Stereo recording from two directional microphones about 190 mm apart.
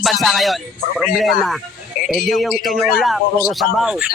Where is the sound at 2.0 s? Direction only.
45° left (ahead or behind).